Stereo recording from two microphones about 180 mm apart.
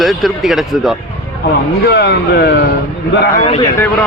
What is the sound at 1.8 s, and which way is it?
Speech, 65° left (ahead or behind).